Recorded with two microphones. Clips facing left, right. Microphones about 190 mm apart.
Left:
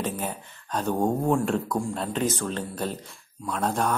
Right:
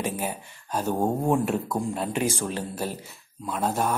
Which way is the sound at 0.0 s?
10° right (ahead or behind).